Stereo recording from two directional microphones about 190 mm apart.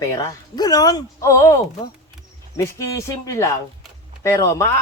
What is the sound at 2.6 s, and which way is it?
Speech, 15° left (ahead or behind).